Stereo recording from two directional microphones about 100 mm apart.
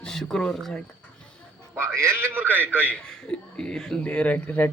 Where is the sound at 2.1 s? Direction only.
20° right (ahead or behind).